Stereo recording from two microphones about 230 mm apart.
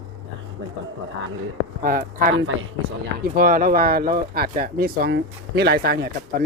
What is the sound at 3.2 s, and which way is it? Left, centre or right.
Speech, right.